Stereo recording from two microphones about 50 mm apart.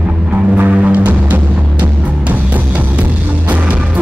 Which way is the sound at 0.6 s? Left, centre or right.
Right.